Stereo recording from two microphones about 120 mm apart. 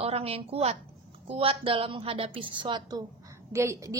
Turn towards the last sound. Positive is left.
turn(degrees=-25)  # may be behind; listen again after turning